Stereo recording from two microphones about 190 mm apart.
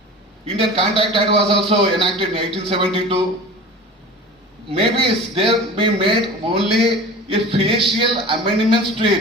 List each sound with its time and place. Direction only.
0.4 s a man's voice: 30° right (ahead or behind)
4.8 s a man's voice: 30° right (ahead or behind)